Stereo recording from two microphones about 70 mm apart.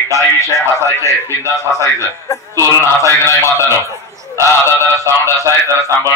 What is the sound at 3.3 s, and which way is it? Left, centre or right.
Speech, left.